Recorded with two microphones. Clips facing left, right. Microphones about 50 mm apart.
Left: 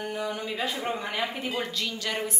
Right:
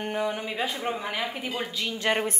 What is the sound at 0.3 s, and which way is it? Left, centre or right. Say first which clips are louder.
Speech: right 1 dB; centre.